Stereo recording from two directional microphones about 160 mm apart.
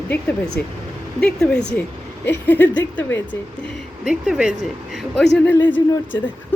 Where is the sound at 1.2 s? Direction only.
5° left (ahead or behind).